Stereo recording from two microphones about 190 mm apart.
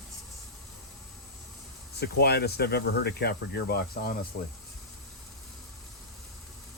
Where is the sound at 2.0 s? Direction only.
60° left (ahead or behind).